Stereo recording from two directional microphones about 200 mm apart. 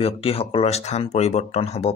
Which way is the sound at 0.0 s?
30° left (ahead or behind).